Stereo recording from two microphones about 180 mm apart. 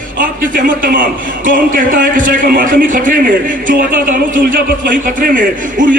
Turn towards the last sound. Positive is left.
turn(degrees=-50)  # may be behind; listen again after turning